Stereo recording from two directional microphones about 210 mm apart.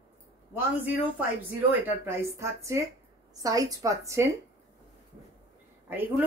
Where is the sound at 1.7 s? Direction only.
10° right (ahead or behind).